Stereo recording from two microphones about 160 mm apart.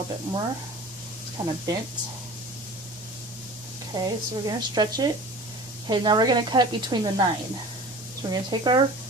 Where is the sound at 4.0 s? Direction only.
25° right (ahead or behind).